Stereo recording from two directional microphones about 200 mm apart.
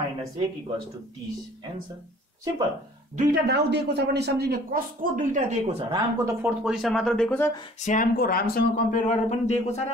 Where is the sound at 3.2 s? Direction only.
45° right (ahead or behind); by 6.5 s 15° right (ahead or behind).